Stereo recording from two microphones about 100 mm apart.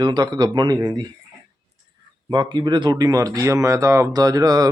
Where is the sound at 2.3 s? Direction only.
50° right (ahead or behind).